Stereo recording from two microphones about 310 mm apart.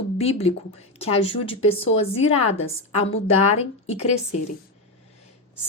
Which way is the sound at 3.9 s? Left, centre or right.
Left.